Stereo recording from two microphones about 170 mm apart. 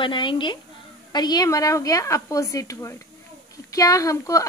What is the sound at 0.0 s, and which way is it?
A woman's voice, 30° left (ahead or behind).